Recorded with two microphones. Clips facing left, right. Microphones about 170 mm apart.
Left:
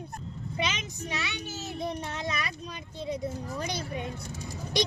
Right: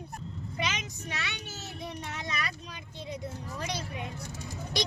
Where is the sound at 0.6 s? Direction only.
25° left (ahead or behind).